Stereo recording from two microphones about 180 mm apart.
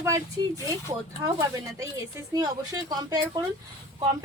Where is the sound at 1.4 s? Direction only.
20° right (ahead or behind).